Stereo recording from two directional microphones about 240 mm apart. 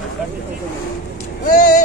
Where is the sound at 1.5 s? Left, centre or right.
Left.